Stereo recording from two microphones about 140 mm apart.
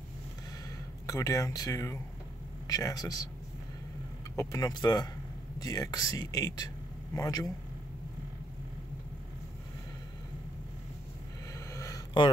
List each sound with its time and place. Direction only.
0.7 s speech: 25° left (ahead or behind)
4.4 s speech: 25° left (ahead or behind)
11.5 s a sound: 20° left (ahead or behind)